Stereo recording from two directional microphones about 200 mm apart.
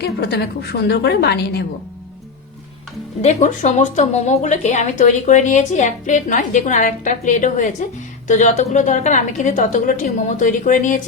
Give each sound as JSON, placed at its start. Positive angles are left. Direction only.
{"t": 0.0, "sound": "a woman's voice", "side_deg": 55}
{"t": 3.2, "sound": "a woman's voice", "side_deg": 35}